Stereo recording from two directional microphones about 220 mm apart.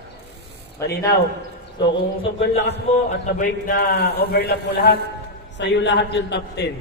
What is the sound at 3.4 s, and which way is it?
A man's voice, 45° left (ahead or behind).